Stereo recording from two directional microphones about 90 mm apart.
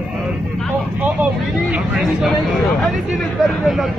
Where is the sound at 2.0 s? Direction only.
Centre (ahead or behind).